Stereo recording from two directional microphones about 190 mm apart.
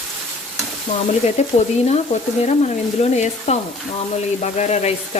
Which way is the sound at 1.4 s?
35° left (ahead or behind).